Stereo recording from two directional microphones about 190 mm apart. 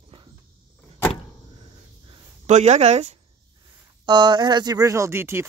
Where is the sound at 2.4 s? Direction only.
35° right (ahead or behind).